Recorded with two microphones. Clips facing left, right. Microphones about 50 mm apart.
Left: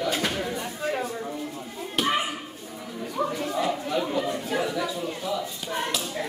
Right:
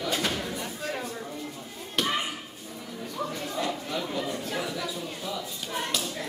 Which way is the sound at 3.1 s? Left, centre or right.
Centre.